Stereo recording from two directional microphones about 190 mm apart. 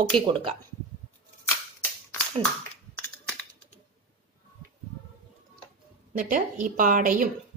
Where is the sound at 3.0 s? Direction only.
10° left (ahead or behind).